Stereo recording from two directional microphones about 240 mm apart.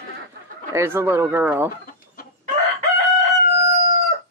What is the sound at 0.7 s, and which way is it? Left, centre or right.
Speech, centre.